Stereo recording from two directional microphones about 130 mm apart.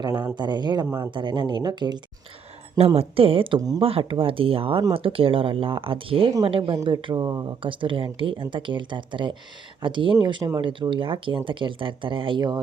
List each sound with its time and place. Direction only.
0.3 s speech: 35° right (ahead or behind)
2.7 s speech: 50° right (ahead or behind); by 7.5 s 30° right (ahead or behind)
7.6 s speech: 40° right (ahead or behind)